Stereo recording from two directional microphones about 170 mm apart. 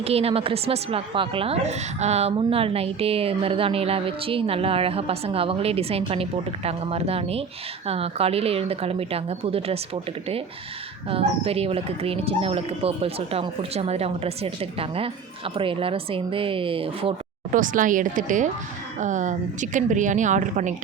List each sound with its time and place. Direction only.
0.0 s a woman's voice: 35° right (ahead or behind)
17.5 s a woman's voice: 50° right (ahead or behind)